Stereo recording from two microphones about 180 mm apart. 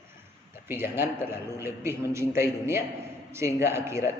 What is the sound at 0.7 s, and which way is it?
A man's voice, 10° right (ahead or behind).